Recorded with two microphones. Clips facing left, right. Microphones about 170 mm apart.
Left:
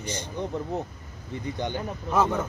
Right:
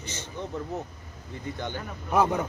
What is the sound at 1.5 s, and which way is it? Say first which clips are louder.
Speech: left 4 dB; 15° left (ahead or behind).